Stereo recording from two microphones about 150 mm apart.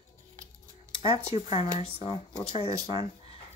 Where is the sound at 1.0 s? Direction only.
40° left (ahead or behind).